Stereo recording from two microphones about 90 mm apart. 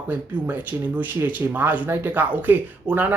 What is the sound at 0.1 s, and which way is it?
Speech, 20° right (ahead or behind).